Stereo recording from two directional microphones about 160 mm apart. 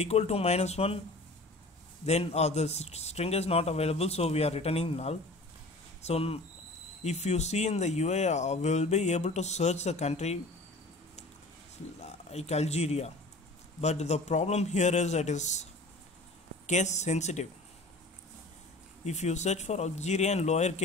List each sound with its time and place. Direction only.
0.0 s speech: 40° left (ahead or behind)
2.0 s a man's voice: 45° left (ahead or behind)
12.0 s speech: 40° left (ahead or behind)
19.0 s speech: 45° left (ahead or behind)